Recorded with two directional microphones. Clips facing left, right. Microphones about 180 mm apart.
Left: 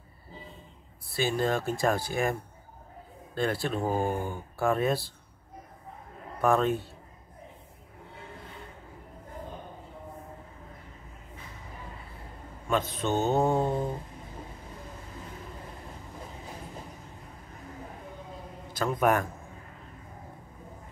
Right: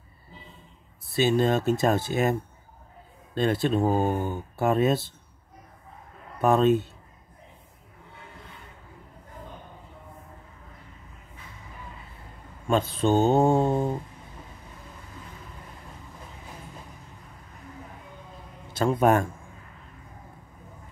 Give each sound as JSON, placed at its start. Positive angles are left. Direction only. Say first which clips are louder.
{"t": 1.0, "sound": "speech", "louder": "right 5 dB", "side_deg": -20}
{"t": 3.3, "sound": "speech", "louder": "right 5 dB", "side_deg": -20}
{"t": 6.4, "sound": "speech", "louder": "right 4 dB", "side_deg": -20}
{"t": 12.6, "sound": "speech", "louder": "right 5 dB", "side_deg": -30}
{"t": 18.7, "sound": "a man's voice", "louder": "right 4 dB", "side_deg": -25}